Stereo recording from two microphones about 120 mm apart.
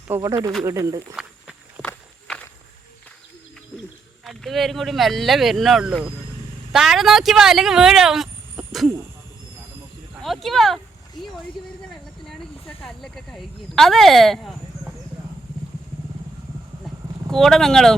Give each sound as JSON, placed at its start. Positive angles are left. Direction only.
{"t": 0.1, "sound": "speech", "side_deg": -25}
{"t": 1.1, "sound": "walk", "side_deg": -5}
{"t": 2.2, "sound": "insect", "side_deg": 10}
{"t": 4.2, "sound": "speech", "side_deg": 0}
{"t": 8.6, "sound": "a sound", "side_deg": 0}
{"t": 10.2, "sound": "speech", "side_deg": 0}
{"t": 12.2, "sound": "speech", "side_deg": 5}
{"t": 17.3, "sound": "speech", "side_deg": 0}